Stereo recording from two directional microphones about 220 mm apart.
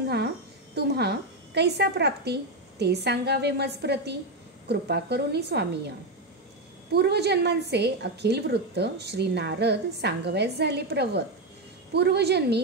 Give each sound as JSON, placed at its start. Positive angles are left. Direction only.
{"t": 0.7, "sound": "a woman's voice", "side_deg": -50}
{"t": 6.9, "sound": "a woman's voice", "side_deg": -50}